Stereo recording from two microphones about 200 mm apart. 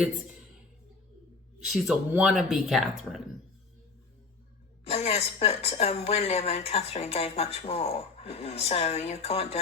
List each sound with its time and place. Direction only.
1.7 s speech: centre (ahead or behind)
4.9 s a woman's voice: 30° left (ahead or behind)